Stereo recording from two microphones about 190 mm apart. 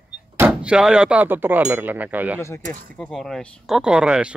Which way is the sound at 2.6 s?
45° right (ahead or behind).